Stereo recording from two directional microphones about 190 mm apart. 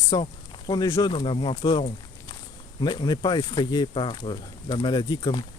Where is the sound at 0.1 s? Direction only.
20° left (ahead or behind).